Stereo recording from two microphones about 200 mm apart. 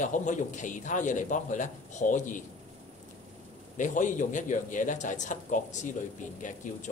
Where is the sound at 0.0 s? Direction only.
40° left (ahead or behind).